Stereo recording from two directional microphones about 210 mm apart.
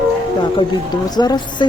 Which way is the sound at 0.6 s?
20° left (ahead or behind).